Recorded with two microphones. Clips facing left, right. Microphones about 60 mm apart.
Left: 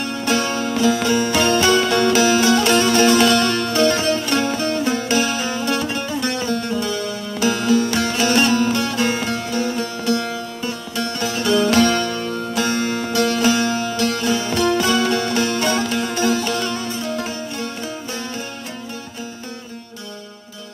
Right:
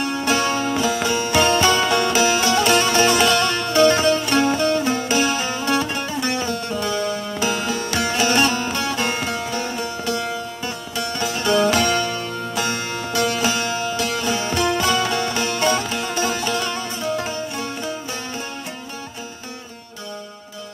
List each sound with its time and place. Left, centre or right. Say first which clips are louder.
0.0 s music: even; centre
2.9 s music: left 2 dB; centre
3.7 s music: right 4 dB; centre